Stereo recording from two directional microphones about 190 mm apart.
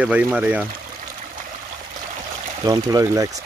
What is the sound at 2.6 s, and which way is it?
Speech, 15° right (ahead or behind).